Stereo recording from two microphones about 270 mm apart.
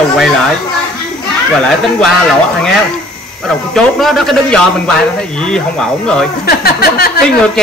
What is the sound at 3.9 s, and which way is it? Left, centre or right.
A man's voice, centre.